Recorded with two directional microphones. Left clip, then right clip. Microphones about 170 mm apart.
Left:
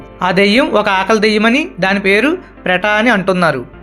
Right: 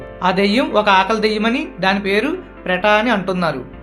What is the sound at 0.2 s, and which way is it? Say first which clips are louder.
Speech: left 5 dB; 40° left (ahead or behind).